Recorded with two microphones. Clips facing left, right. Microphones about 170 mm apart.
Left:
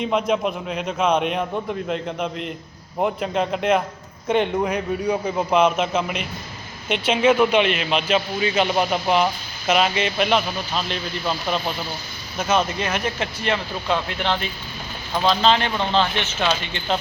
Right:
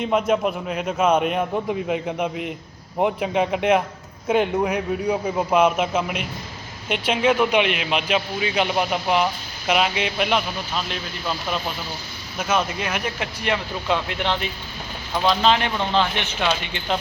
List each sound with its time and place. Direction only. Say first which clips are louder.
0.0 s a man's voice: right 1 dB; 5° right (ahead or behind)